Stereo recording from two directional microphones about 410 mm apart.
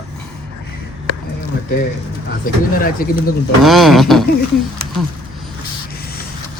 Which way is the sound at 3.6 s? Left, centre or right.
Centre.